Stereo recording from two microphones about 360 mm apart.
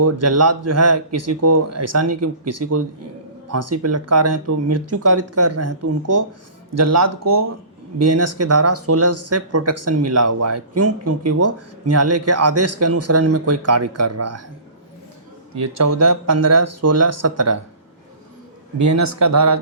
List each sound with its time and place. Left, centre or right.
0.0 s speech: right
15.6 s speech: right
18.8 s speech: right